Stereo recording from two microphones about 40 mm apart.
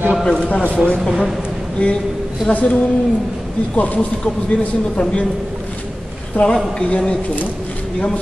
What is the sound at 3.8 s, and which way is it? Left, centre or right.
Speech, left.